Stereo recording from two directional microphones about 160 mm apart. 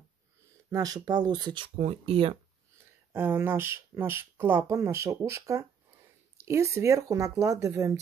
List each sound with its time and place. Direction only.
0.7 s speech: 25° right (ahead or behind)
3.1 s speech: 15° right (ahead or behind)